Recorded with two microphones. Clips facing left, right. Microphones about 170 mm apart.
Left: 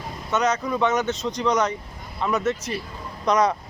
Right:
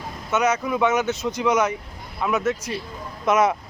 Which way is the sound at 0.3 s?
5° right (ahead or behind).